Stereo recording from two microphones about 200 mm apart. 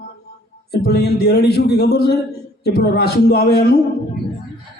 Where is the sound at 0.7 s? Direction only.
55° left (ahead or behind).